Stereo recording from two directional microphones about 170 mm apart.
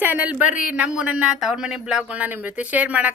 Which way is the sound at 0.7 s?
5° right (ahead or behind).